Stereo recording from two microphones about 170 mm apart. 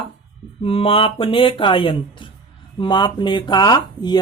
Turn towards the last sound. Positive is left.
turn(degrees=25)  # may be behind; listen again after turning